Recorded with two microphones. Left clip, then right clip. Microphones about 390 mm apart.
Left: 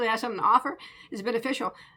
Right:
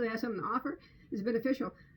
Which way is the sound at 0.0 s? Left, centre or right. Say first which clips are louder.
Left 10 dB; centre.